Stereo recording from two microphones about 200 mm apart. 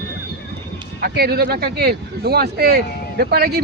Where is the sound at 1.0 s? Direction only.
50° right (ahead or behind).